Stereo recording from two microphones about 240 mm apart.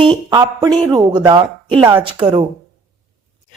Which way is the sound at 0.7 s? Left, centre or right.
Centre.